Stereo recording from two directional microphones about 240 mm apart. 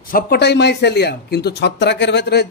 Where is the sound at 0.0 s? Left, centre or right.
Left.